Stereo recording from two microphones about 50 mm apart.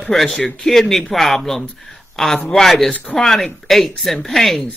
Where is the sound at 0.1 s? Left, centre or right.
Centre.